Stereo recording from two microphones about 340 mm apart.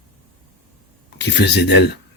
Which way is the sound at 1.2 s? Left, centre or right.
Left.